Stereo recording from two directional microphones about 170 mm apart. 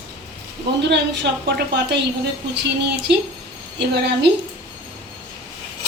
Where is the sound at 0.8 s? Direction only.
85° right.